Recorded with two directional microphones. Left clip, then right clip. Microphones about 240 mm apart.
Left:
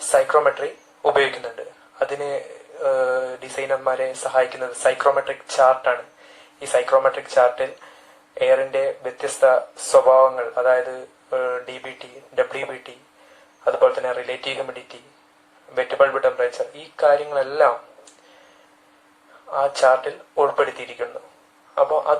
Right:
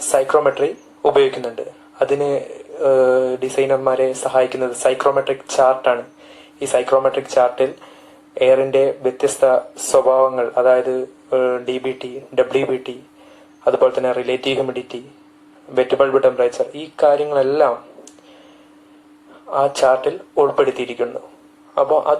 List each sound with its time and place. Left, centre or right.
0.1 s speech: right
19.5 s speech: right